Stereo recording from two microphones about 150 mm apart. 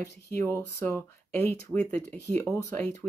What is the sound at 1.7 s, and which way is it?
Speech, 5° left (ahead or behind).